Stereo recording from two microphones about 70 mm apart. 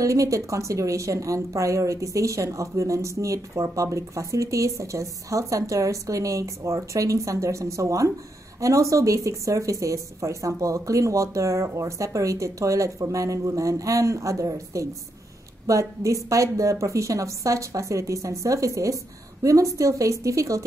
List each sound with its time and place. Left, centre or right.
0.0 s a woman's voice: right